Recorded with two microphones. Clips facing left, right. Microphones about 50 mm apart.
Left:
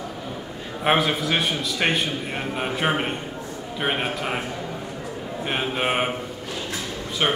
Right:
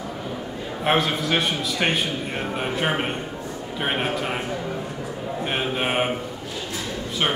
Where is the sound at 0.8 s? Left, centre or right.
Centre.